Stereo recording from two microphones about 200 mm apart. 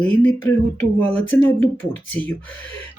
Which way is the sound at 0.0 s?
5° left (ahead or behind).